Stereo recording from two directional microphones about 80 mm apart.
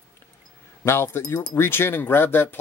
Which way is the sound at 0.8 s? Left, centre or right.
Left.